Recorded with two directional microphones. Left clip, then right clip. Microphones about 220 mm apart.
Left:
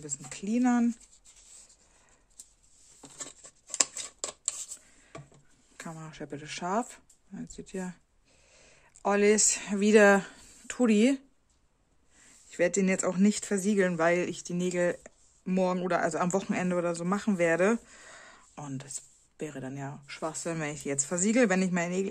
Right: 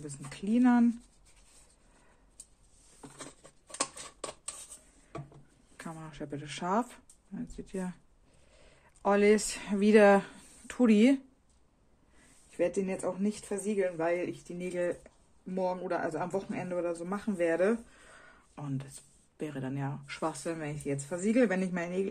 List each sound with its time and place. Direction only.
0.0 s speech: 15° left (ahead or behind)
3.6 s a sound: 50° left (ahead or behind)
5.8 s speech: 15° left (ahead or behind)
12.5 s speech: 30° left (ahead or behind)
13.0 s speech: 50° left (ahead or behind); by 20.4 s 15° left (ahead or behind)
20.4 s speech: 35° left (ahead or behind)